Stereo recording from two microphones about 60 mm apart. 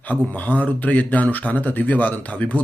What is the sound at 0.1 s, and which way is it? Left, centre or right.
Speech, left.